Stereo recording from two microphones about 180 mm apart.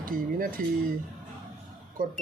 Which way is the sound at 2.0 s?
50° right (ahead or behind).